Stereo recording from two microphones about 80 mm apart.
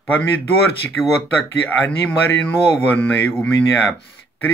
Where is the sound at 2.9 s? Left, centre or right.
Centre.